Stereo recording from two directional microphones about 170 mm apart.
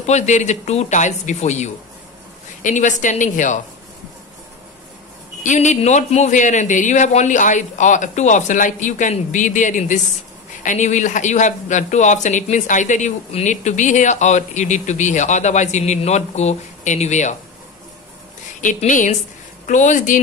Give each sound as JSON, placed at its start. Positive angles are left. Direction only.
{"t": 0.0, "sound": "speech", "side_deg": 40}
{"t": 5.4, "sound": "speech", "side_deg": 45}
{"t": 18.6, "sound": "speech", "side_deg": 45}